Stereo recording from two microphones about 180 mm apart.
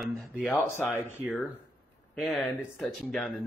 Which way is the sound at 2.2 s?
Centre (ahead or behind).